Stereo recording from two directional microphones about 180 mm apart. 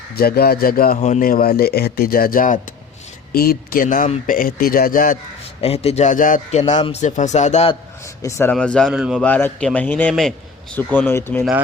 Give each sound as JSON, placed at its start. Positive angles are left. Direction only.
{"t": 0.1, "sound": "speech", "side_deg": 60}
{"t": 0.9, "sound": "a man's voice", "side_deg": 35}
{"t": 1.2, "sound": "speech", "side_deg": 55}
{"t": 5.5, "sound": "a man's voice", "side_deg": 35}
{"t": 8.0, "sound": "a man's voice", "side_deg": 15}
{"t": 9.2, "sound": "a man's voice", "side_deg": 10}